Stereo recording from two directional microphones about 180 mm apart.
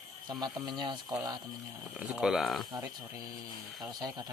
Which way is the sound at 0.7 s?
20° right (ahead or behind).